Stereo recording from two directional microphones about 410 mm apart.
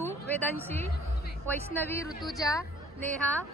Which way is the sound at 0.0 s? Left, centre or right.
Centre.